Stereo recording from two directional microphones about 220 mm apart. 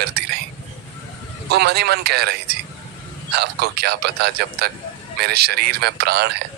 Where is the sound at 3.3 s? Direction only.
45° right (ahead or behind).